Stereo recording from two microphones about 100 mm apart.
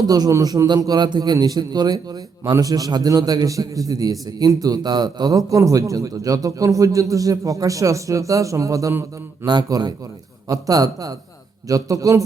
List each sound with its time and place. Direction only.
0.1 s a man's voice: 35° right (ahead or behind)
9.5 s a man's voice: 40° right (ahead or behind)